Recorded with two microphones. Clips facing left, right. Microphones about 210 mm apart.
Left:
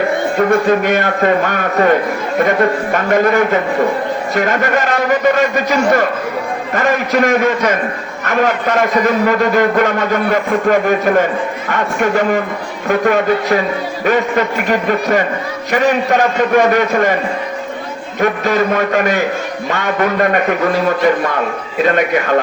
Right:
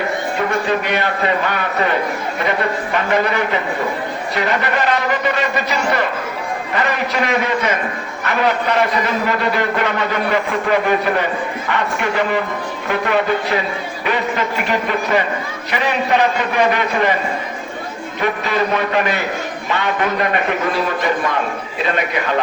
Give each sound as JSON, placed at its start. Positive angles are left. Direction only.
{"t": 0.3, "sound": "a man's voice", "side_deg": 50}
{"t": 18.2, "sound": "a man's voice", "side_deg": 45}